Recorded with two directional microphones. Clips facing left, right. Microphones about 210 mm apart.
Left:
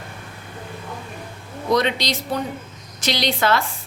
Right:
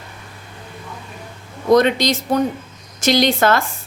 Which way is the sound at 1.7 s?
45° right (ahead or behind).